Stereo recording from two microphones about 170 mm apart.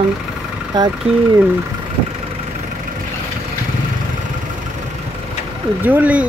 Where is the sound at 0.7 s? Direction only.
25° right (ahead or behind).